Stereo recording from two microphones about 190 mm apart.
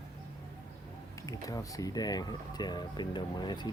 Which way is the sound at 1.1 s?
15° left (ahead or behind).